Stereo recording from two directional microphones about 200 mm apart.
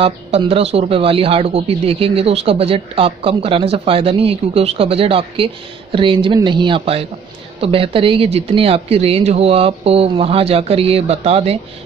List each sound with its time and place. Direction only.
0.0 s speech: 30° right (ahead or behind)